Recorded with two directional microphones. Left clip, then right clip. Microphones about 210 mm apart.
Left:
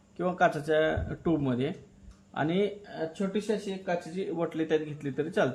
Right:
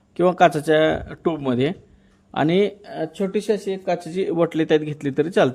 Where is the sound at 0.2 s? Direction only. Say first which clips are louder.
Right 10 dB; 45° right (ahead or behind).